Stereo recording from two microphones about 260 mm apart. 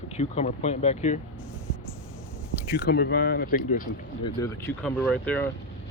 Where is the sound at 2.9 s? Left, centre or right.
Left.